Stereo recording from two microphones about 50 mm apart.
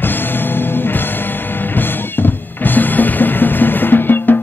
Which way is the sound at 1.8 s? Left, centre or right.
Left.